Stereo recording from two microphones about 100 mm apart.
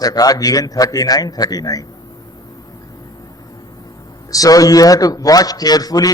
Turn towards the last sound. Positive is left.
turn(degrees=40)  # may be behind; listen again after turning